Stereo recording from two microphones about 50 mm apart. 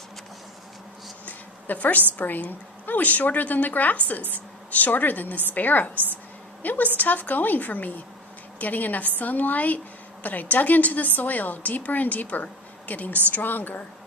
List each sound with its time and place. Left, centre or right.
1.2 s a woman's voice: left